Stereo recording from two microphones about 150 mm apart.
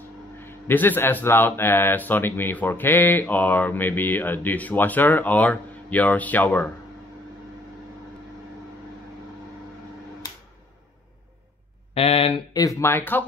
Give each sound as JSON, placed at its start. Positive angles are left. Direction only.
{"t": 0.4, "sound": "speech", "side_deg": 15}
{"t": 11.9, "sound": "speech", "side_deg": 40}
{"t": 12.5, "sound": "speech", "side_deg": 20}